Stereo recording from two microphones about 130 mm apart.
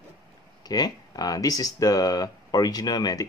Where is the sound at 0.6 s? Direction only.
30° left (ahead or behind).